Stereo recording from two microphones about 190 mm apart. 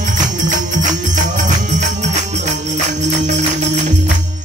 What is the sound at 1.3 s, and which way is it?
Music, 40° right (ahead or behind).